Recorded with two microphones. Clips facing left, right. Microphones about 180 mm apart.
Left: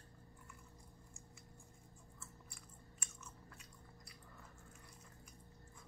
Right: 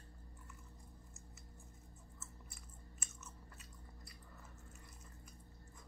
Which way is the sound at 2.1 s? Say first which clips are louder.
Even; 5° right (ahead or behind).